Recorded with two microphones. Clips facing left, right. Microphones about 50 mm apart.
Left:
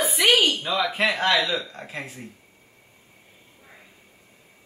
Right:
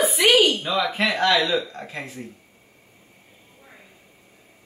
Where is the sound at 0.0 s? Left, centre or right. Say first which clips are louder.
Right 3 dB; centre.